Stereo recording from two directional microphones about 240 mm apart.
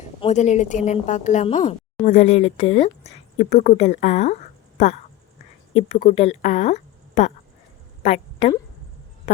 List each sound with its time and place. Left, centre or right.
0.2 s a woman's voice: left
5.7 s a woman's voice: left